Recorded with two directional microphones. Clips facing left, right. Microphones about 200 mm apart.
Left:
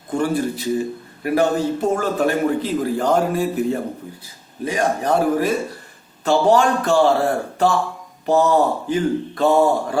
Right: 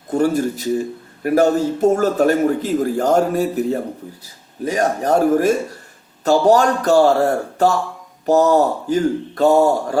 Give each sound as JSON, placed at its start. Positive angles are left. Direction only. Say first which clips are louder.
{"t": 0.1, "sound": "a man's voice", "louder": "right 3 dB", "side_deg": -45}